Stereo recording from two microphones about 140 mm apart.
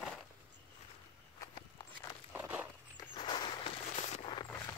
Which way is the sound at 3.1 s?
35° left (ahead or behind).